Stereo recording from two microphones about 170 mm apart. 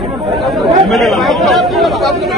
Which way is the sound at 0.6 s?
Centre (ahead or behind).